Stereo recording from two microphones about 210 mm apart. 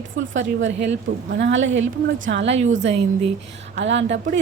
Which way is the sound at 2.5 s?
35° right (ahead or behind).